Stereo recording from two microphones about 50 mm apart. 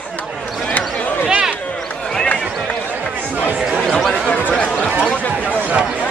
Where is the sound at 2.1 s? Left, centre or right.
Left.